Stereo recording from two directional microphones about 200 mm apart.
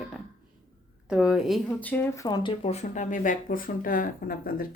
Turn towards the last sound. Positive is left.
turn(degrees=45)  # may be behind; listen again after turning